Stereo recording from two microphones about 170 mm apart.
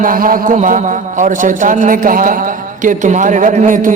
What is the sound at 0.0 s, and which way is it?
A man's voice, 55° right (ahead or behind).